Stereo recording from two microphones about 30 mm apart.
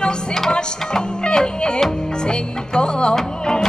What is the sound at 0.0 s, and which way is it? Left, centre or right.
Music, left.